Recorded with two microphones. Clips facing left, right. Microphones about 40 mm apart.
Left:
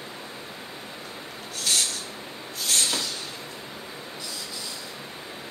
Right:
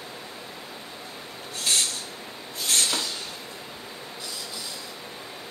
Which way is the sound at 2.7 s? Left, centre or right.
Right.